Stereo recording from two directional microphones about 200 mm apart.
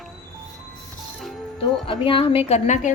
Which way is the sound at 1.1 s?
Centre (ahead or behind).